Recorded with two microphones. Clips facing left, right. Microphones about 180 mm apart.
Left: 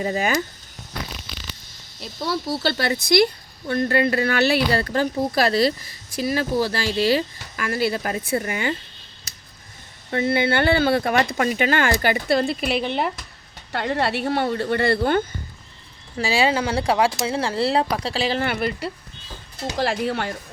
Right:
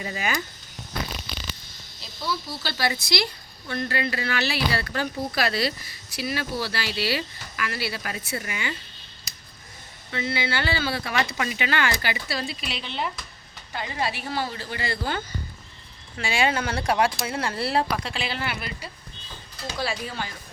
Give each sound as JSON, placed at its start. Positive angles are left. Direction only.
{"t": 0.0, "sound": "speech", "side_deg": 40}
{"t": 2.0, "sound": "a woman's voice", "side_deg": 65}
{"t": 10.1, "sound": "speech", "side_deg": 50}
{"t": 13.7, "sound": "a woman's voice", "side_deg": 65}
{"t": 16.1, "sound": "a woman's voice", "side_deg": 35}